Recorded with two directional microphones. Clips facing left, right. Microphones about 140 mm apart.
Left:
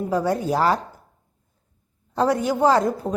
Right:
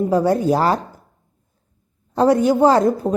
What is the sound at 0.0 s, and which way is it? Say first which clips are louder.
Speech: right 6 dB; 30° right (ahead or behind).